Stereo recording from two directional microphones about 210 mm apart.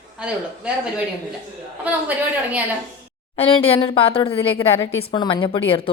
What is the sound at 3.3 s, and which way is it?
Speech, 25° left (ahead or behind).